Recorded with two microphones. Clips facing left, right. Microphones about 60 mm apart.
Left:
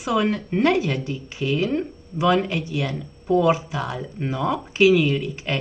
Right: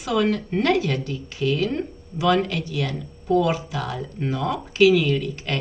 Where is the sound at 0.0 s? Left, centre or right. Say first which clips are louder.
Even; centre.